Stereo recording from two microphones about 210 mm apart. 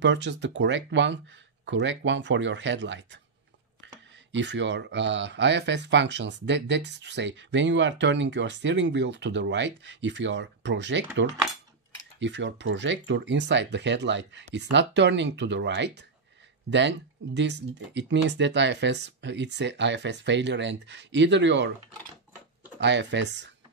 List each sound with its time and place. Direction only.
0.0 s speech: 60° right (ahead or behind)
12.2 s speech: 60° right (ahead or behind)
22.8 s speech: 55° right (ahead or behind)